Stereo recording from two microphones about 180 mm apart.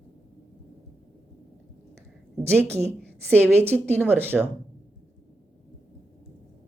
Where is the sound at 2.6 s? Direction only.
15° right (ahead or behind).